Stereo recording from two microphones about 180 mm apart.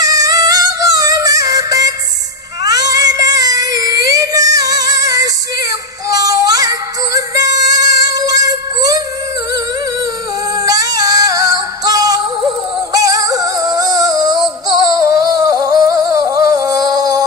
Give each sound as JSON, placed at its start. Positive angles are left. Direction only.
{"t": 0.0, "sound": "music", "side_deg": -20}
{"t": 2.6, "sound": "cat", "side_deg": -20}
{"t": 4.1, "sound": "female singing", "side_deg": -20}
{"t": 10.6, "sound": "music", "side_deg": -20}